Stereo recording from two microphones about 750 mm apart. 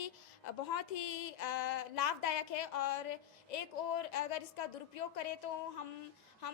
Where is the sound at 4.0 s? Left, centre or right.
Left.